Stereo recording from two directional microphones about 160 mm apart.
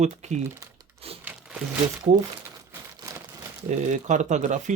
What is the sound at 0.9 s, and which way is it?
Crumpling, 40° right (ahead or behind).